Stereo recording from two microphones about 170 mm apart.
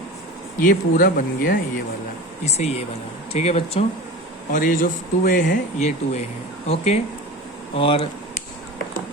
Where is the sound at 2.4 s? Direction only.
40° left (ahead or behind).